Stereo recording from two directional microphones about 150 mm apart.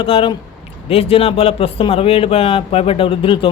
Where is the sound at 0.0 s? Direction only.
35° left (ahead or behind).